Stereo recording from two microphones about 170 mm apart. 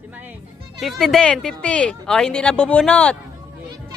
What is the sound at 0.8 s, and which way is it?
A woman's voice, centre (ahead or behind).